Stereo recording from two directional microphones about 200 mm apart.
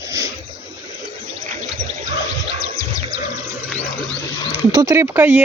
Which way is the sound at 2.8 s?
15° left (ahead or behind).